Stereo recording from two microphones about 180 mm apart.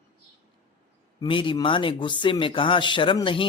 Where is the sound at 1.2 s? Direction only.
30° left (ahead or behind).